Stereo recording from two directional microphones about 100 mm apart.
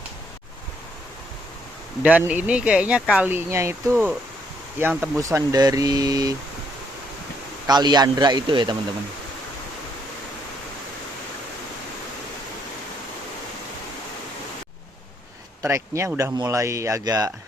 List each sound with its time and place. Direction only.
2.0 s speech: 15° right (ahead or behind)
5.2 s speech: 35° right (ahead or behind)
7.7 s speech: 45° right (ahead or behind)
15.6 s speech: 25° right (ahead or behind)